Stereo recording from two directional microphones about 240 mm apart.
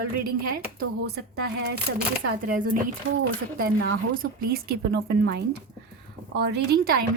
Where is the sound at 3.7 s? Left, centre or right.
Right.